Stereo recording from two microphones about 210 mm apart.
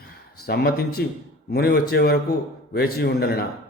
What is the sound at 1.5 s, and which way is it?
A man's voice, 50° left (ahead or behind).